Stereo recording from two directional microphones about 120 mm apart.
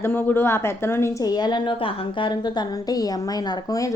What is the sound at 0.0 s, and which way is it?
Speech, 20° left (ahead or behind).